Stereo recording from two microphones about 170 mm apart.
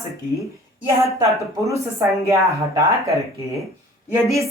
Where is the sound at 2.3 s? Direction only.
20° right (ahead or behind).